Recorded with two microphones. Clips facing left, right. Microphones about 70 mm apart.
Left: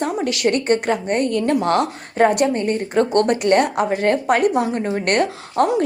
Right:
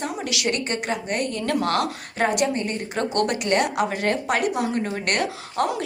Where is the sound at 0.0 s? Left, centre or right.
Left.